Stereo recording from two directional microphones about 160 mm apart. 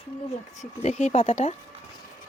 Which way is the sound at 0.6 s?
45° left (ahead or behind).